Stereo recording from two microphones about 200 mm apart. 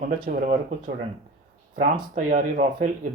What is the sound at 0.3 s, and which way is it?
Speech, 40° right (ahead or behind).